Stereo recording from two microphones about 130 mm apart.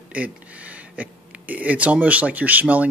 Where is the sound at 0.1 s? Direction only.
10° right (ahead or behind).